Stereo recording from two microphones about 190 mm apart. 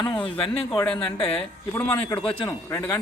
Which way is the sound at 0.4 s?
30° left (ahead or behind).